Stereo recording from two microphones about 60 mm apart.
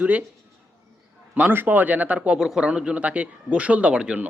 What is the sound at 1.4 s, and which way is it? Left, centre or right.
A man's voice, right.